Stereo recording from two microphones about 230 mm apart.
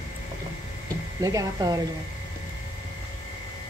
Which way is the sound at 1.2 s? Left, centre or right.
Centre.